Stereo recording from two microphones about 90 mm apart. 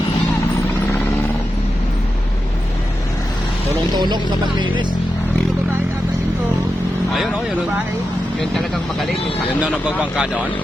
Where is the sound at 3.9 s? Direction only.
55° right (ahead or behind).